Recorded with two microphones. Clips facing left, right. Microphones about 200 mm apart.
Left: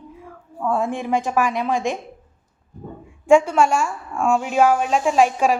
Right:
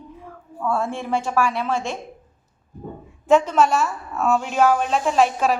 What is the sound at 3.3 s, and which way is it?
A woman's voice, 10° left (ahead or behind).